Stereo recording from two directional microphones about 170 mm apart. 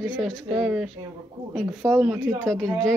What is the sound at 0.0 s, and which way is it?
Speech, 5° left (ahead or behind).